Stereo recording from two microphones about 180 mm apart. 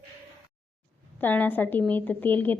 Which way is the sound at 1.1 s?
10° left (ahead or behind).